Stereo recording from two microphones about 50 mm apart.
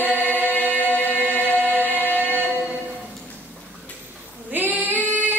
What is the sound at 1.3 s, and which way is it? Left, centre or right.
Chant, left.